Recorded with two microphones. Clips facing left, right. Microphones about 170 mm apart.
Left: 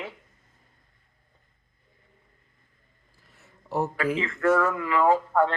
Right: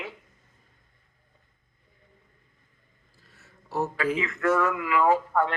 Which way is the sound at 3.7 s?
15° left (ahead or behind).